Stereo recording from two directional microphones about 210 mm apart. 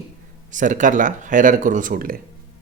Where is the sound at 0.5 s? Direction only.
35° right (ahead or behind).